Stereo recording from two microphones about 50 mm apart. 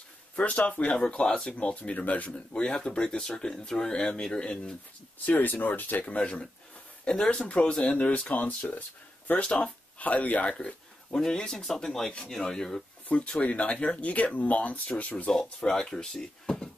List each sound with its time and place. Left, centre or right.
0.4 s speech: left
2.5 s speech: centre
5.2 s speech: left
6.1 s speech: left
9.4 s speech: left
10.6 s speech: centre
13.1 s speech: left
15.3 s speech: centre